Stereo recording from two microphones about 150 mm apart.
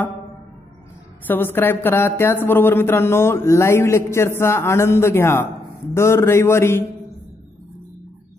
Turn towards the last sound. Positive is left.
turn(degrees=15)  # may be behind; listen again after turning